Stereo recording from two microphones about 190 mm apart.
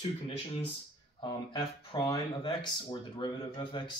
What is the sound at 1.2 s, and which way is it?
Speech, 25° left (ahead or behind).